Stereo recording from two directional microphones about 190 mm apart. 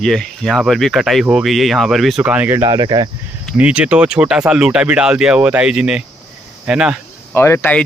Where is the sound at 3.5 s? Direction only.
5° right (ahead or behind).